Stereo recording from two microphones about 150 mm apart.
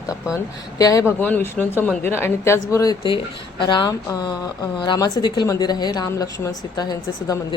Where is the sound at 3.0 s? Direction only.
35° left (ahead or behind).